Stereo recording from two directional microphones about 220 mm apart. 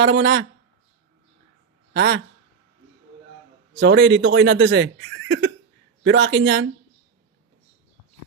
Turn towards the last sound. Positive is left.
turn(degrees=-50)  # may be behind; listen again after turning